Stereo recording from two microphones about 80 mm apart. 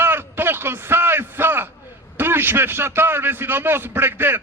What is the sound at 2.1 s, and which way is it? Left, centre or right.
A man's voice, right.